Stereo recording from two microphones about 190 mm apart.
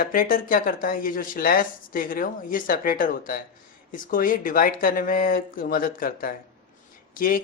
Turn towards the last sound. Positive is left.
turn(degrees=50)  # may be behind; listen again after turning